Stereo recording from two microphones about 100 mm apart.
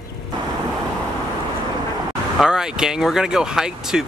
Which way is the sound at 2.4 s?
5° right (ahead or behind).